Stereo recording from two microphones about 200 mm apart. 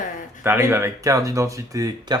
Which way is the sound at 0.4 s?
10° right (ahead or behind).